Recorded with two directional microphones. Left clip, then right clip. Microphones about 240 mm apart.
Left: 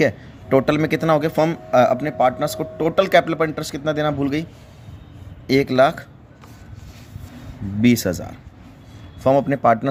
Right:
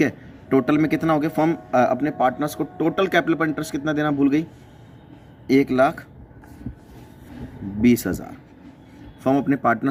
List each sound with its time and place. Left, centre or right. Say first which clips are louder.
0.0 s a man's voice: left 4 dB; left
5.5 s speech: left 2 dB; left
7.8 s speech: left 1 dB; left
9.2 s a man's voice: left 4 dB; left